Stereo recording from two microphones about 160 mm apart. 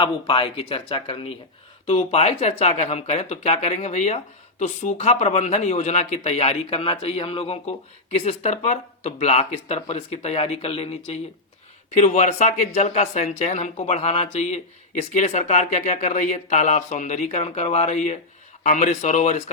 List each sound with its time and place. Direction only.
0.0 s speech: 30° left (ahead or behind); by 19.4 s 50° left (ahead or behind)